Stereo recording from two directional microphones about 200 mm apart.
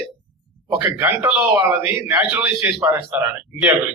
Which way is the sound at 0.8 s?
10° right (ahead or behind).